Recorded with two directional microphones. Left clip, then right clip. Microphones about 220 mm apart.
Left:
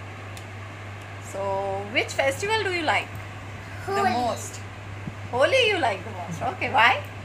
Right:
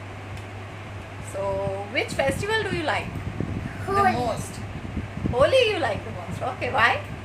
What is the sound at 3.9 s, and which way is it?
Speech, 15° right (ahead or behind).